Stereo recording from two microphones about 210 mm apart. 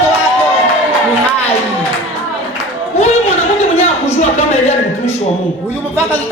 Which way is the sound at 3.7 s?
35° left (ahead or behind).